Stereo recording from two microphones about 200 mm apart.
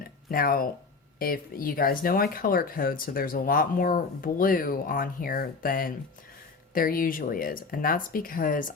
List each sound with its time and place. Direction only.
0.3 s speech: 45° left (ahead or behind)